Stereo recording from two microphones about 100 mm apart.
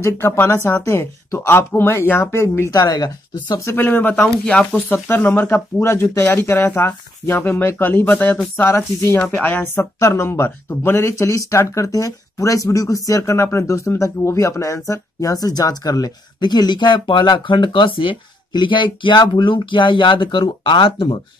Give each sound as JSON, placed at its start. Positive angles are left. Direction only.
{"t": 0.0, "sound": "speech", "side_deg": 25}
{"t": 2.7, "sound": "speech", "side_deg": 35}
{"t": 3.8, "sound": "speech", "side_deg": 15}
{"t": 4.9, "sound": "speech", "side_deg": 25}
{"t": 9.9, "sound": "speech", "side_deg": 30}
{"t": 19.4, "sound": "speech", "side_deg": 55}